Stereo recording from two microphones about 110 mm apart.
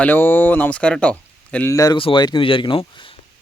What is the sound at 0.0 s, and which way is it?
Speech, 20° left (ahead or behind).